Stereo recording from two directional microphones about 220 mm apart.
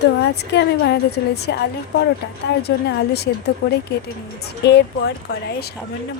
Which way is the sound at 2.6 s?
45° left (ahead or behind).